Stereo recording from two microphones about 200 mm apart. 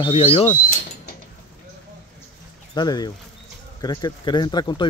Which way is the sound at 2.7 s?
20° left (ahead or behind).